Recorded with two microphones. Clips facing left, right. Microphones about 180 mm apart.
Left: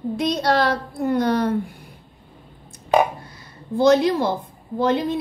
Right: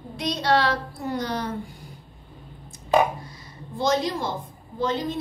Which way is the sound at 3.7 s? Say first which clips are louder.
Left 8 dB; 65° left (ahead or behind).